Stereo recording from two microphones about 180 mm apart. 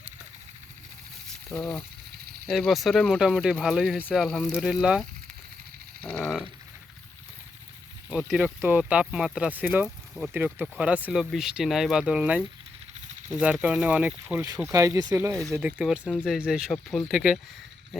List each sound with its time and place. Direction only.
1.5 s speech: centre (ahead or behind)
6.0 s a sound: 5° left (ahead or behind)
8.3 s speech: 10° right (ahead or behind)
14.7 s speech: 15° right (ahead or behind)
15.8 s speech: 5° right (ahead or behind)